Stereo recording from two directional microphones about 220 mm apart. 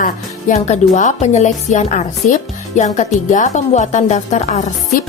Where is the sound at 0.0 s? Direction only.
35° left (ahead or behind).